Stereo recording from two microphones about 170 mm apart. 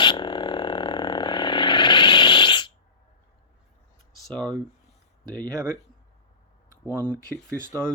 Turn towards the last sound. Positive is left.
turn(degrees=-15)  # may be behind; listen again after turning